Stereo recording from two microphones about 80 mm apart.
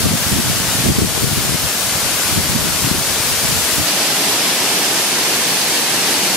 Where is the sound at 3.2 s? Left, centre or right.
Centre.